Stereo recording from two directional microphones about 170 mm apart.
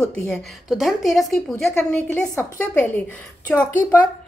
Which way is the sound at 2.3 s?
10° left (ahead or behind).